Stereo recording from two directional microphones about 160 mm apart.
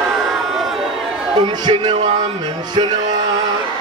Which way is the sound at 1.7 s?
30° right (ahead or behind).